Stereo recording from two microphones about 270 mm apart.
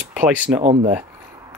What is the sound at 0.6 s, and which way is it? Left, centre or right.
Speech, right.